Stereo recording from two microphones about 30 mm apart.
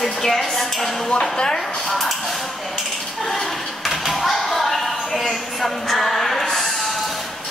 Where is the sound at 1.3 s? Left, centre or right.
Centre.